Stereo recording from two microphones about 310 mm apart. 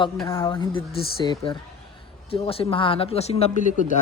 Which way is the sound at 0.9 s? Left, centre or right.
Left.